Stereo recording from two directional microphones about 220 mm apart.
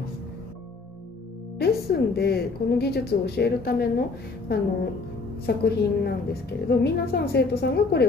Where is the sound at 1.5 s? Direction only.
45° left (ahead or behind).